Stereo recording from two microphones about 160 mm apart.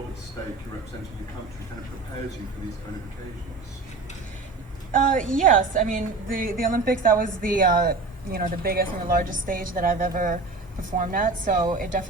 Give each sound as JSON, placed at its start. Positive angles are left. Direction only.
{"t": 4.9, "sound": "a woman's voice", "side_deg": -55}